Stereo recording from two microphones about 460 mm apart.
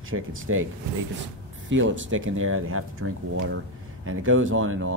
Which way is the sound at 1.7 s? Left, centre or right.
Right.